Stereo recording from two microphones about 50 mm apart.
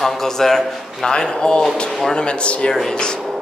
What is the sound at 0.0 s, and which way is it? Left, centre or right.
A man's voice, centre.